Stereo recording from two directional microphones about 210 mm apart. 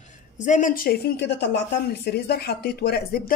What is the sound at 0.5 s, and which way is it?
Speech, 40° left (ahead or behind).